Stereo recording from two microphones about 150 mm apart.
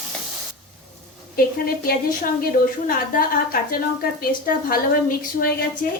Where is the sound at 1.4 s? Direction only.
75° left (ahead or behind).